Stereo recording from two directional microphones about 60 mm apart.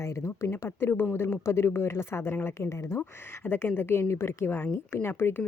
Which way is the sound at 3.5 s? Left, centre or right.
Left.